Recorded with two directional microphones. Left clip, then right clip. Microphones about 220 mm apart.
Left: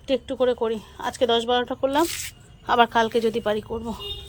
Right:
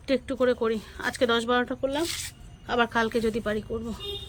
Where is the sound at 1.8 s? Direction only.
20° left (ahead or behind).